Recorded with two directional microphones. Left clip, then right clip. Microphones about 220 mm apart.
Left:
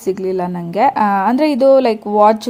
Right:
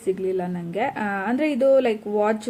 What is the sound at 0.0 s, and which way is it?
A woman's voice, 30° left (ahead or behind).